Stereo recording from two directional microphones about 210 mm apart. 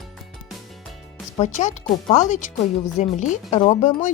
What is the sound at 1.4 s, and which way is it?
A woman's voice, 35° left (ahead or behind).